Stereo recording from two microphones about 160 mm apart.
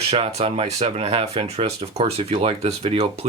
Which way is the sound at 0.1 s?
40° right (ahead or behind).